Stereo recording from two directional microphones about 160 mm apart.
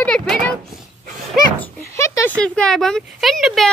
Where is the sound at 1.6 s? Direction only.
15° left (ahead or behind).